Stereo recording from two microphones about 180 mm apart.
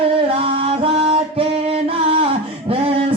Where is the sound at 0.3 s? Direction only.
30° right (ahead or behind).